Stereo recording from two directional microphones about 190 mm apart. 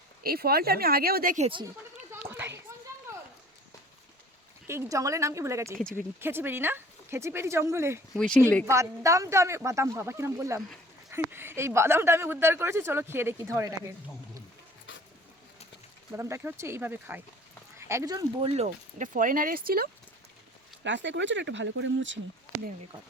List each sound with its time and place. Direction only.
0.2 s speech: 50° right (ahead or behind)
2.3 s a sound: 15° right (ahead or behind)
4.6 s a woman's voice: 15° right (ahead or behind)
8.1 s speech: centre (ahead or behind)
8.6 s a woman's voice: 15° right (ahead or behind)
16.1 s a woman's voice: 15° right (ahead or behind); by 19.9 s 50° right (ahead or behind)
20.8 s speech: 70° right (ahead or behind)